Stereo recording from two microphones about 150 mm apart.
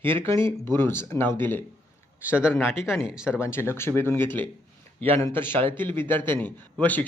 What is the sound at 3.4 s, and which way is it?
Speech, 15° left (ahead or behind).